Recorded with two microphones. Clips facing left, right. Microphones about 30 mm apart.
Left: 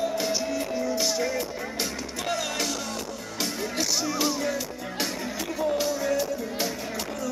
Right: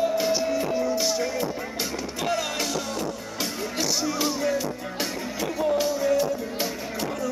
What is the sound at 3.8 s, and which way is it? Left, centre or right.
Music, centre.